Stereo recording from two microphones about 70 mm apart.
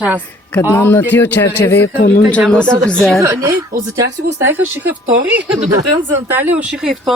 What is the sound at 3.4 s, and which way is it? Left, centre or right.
Speech, right.